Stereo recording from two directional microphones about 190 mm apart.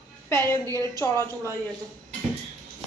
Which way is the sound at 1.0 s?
15° left (ahead or behind).